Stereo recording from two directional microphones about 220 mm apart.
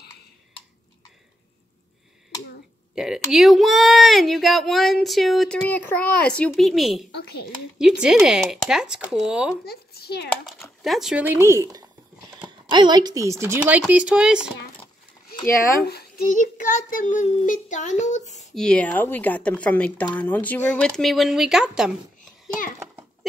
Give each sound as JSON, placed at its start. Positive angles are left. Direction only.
{"t": 2.9, "sound": "speech", "side_deg": 0}
{"t": 9.7, "sound": "a child's voice", "side_deg": 45}
{"t": 10.3, "sound": "speech", "side_deg": 0}
{"t": 15.9, "sound": "child singing", "side_deg": 40}
{"t": 18.5, "sound": "speech", "side_deg": 5}